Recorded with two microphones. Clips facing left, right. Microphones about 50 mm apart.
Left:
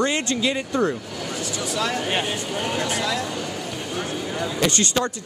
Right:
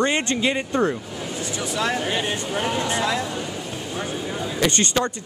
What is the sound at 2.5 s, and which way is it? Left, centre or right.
Speech, right.